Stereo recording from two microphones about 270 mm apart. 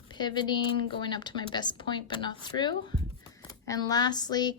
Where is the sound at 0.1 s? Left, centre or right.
Centre.